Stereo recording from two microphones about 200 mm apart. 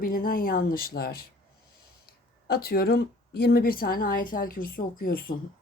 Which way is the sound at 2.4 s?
50° left (ahead or behind).